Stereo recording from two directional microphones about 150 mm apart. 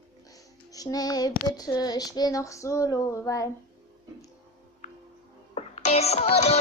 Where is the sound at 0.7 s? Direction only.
25° left (ahead or behind).